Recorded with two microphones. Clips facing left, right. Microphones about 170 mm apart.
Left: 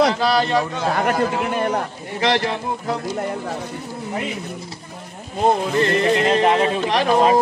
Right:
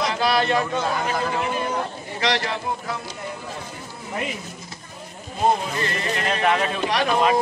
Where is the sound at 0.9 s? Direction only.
60° left (ahead or behind).